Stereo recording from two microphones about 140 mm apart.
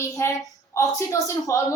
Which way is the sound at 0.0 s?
20° left (ahead or behind).